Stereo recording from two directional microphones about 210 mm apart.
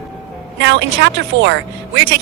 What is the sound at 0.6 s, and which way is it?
Speech, 55° right (ahead or behind).